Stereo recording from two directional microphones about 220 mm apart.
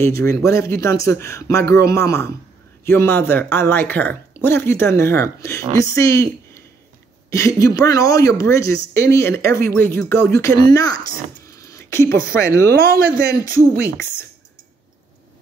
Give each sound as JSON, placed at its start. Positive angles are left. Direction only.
{"t": 0.0, "sound": "speech", "side_deg": 10}
{"t": 7.2, "sound": "a woman's voice", "side_deg": 15}
{"t": 11.4, "sound": "a sound", "side_deg": 15}
{"t": 12.1, "sound": "speech", "side_deg": -45}